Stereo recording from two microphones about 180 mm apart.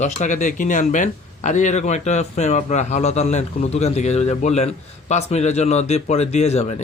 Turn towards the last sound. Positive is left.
turn(degrees=35)  # may be behind; listen again after turning